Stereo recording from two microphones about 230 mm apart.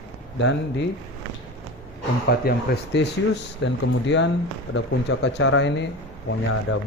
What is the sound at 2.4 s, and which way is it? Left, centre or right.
Speech, left.